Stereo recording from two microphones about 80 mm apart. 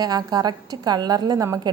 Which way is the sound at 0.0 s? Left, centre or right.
Right.